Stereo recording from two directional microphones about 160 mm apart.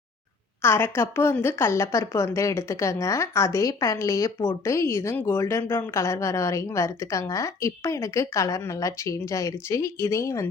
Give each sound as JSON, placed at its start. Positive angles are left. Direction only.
{"t": 0.6, "sound": "a woman's voice", "side_deg": 15}